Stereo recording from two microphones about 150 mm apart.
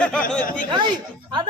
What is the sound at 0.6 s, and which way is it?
Speech, 30° right (ahead or behind).